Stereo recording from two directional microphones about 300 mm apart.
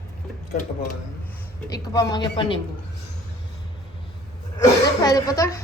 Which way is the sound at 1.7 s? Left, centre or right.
Centre.